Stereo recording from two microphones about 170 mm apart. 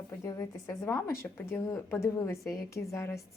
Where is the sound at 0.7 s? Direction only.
15° left (ahead or behind).